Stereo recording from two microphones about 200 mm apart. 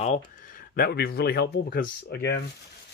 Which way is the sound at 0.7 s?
50° left (ahead or behind).